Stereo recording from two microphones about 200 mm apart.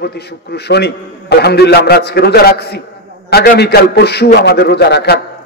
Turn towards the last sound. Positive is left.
turn(degrees=55)  # may be behind; listen again after turning